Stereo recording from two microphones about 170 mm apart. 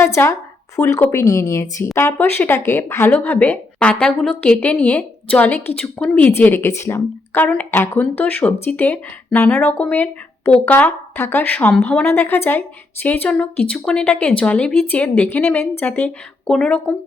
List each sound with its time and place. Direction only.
0.0 s speech: 15° left (ahead or behind)